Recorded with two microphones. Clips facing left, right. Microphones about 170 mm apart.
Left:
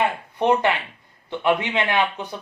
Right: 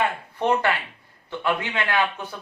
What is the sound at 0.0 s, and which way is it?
Speech, 20° left (ahead or behind).